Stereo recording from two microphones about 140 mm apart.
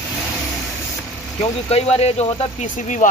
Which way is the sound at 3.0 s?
70° left (ahead or behind).